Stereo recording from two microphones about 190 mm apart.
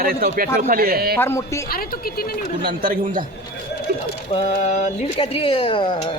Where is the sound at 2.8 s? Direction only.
45° right (ahead or behind).